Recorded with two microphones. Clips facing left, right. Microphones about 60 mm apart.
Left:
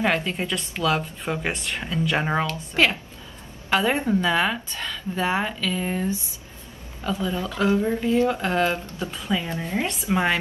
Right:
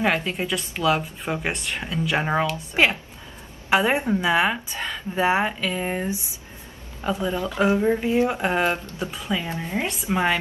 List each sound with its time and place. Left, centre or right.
0.0 s a woman's voice: centre
2.7 s a woman's voice: centre
9.1 s a woman's voice: centre